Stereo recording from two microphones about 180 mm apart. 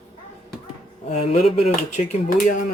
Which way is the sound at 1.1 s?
40° left (ahead or behind).